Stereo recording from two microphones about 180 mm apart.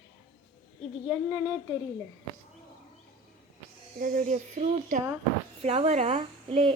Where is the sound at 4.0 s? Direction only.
50° right (ahead or behind).